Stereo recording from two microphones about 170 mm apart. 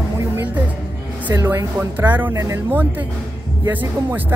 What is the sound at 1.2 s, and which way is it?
Speech, 15° right (ahead or behind).